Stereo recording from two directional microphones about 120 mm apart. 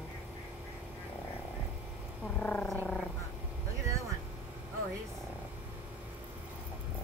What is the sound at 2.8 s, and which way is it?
Vehicle, 10° left (ahead or behind).